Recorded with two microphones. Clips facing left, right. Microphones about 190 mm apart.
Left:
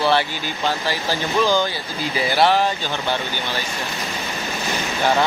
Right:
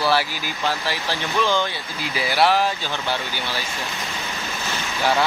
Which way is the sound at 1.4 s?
Centre (ahead or behind).